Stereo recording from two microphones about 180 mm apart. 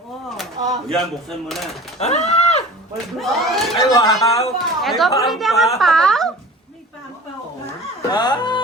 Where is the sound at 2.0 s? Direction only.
35° left (ahead or behind).